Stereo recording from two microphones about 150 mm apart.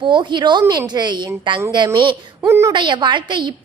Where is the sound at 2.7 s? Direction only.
30° right (ahead or behind).